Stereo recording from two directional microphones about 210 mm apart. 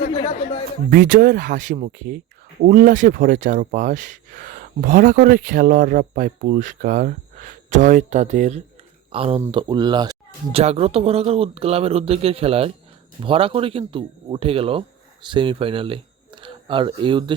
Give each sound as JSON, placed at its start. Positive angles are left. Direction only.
{"t": 0.9, "sound": "speech", "side_deg": -40}